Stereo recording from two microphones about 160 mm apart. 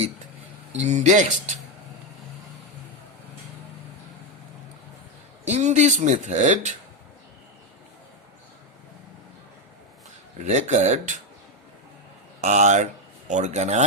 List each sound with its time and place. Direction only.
0.7 s speech: 45° right (ahead or behind)
5.5 s speech: 45° right (ahead or behind)
10.4 s speech: 45° right (ahead or behind)
12.4 s speech: 50° right (ahead or behind)